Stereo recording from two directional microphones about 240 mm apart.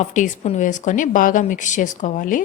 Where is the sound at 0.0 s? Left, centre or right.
Left.